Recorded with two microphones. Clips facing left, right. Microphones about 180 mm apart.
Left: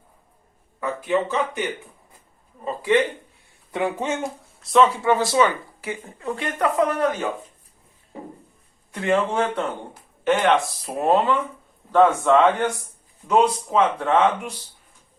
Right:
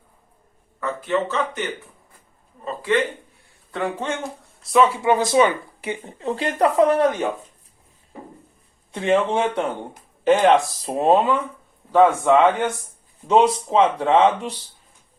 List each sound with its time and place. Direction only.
0.8 s speech: 15° left (ahead or behind)
2.6 s speech: 20° left (ahead or behind)
4.2 s speech: centre (ahead or behind)
5.0 s speech: 15° right (ahead or behind)
8.9 s speech: 25° right (ahead or behind)
10.2 s speech: 35° right (ahead or behind)
10.9 s a man's voice: 20° right (ahead or behind)
13.2 s speech: 25° right (ahead or behind)